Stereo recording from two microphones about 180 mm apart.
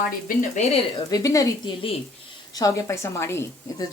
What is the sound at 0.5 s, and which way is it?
Speech, 35° left (ahead or behind).